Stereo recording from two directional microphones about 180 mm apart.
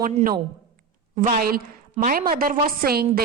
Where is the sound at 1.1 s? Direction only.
35° right (ahead or behind).